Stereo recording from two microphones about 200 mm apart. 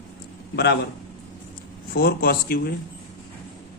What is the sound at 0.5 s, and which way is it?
Speech, 55° left (ahead or behind).